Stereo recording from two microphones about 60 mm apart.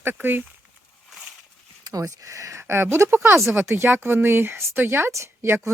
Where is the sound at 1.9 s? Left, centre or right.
Right.